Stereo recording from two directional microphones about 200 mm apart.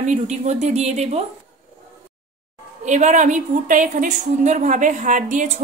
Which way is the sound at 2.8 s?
35° right (ahead or behind).